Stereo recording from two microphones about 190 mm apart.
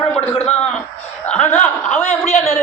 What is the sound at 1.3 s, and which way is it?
Speech, 35° left (ahead or behind).